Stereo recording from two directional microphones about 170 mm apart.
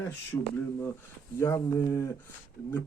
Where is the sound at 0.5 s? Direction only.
15° left (ahead or behind).